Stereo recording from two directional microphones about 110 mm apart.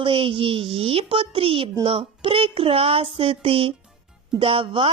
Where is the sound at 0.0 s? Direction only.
55° right (ahead or behind).